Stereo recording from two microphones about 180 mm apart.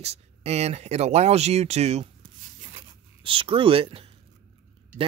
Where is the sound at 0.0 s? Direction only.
35° right (ahead or behind).